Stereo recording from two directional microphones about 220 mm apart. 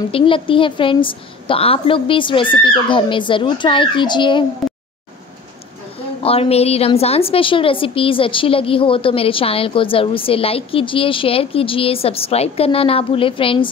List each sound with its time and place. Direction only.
0.1 s a woman's voice: 25° left (ahead or behind)
6.2 s a woman's voice: 25° left (ahead or behind)